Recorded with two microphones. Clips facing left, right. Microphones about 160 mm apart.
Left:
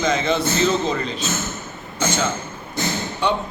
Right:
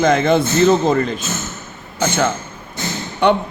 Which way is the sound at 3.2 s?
60° right (ahead or behind).